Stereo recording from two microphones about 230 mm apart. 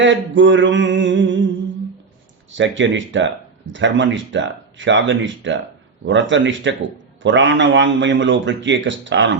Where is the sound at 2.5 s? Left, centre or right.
Right.